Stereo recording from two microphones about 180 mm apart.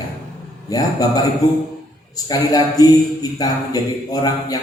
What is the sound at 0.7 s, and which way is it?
Speech, 20° left (ahead or behind).